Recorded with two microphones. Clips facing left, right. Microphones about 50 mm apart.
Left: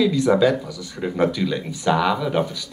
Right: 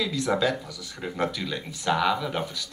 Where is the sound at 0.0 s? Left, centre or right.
Centre.